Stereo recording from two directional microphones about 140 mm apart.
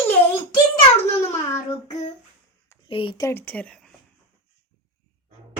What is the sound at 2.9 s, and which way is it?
Speech, 40° left (ahead or behind).